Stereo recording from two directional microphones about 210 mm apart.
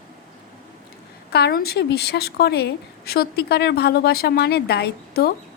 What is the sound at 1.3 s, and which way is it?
A woman's voice, 50° left (ahead or behind).